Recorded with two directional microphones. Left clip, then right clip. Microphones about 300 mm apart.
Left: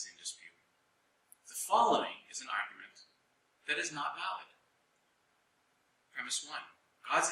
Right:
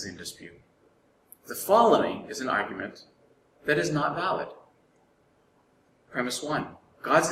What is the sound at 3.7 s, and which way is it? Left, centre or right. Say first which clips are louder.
Speech: right 10 dB; centre.